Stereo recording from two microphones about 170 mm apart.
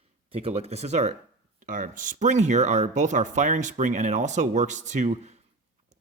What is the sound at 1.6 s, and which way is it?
Speech, 50° right (ahead or behind).